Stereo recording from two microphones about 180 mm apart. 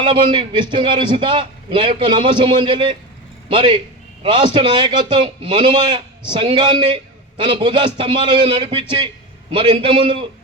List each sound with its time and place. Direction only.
0.0 s a man's voice: 25° right (ahead or behind)